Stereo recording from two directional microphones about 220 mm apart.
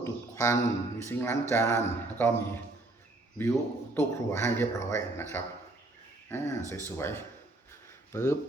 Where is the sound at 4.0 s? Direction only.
10° left (ahead or behind).